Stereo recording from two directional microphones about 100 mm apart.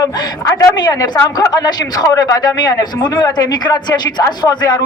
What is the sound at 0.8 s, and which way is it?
A man's voice, 45° left (ahead or behind).